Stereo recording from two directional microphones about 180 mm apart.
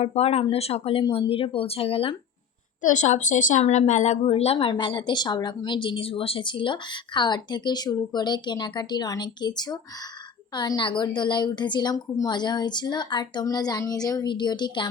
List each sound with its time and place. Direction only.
0.0 s speech: 35° left (ahead or behind)
2.8 s speech: 45° left (ahead or behind); by 14.8 s 25° left (ahead or behind)